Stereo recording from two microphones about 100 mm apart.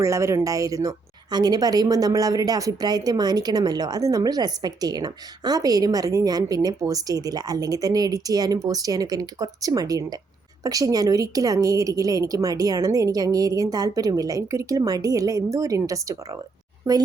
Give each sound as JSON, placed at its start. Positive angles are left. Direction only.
{"t": 0.0, "sound": "speech", "side_deg": -30}